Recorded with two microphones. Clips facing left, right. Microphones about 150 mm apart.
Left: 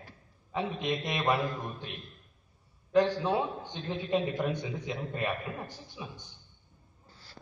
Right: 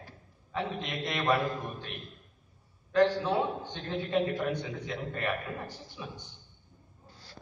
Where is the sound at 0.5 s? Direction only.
20° left (ahead or behind).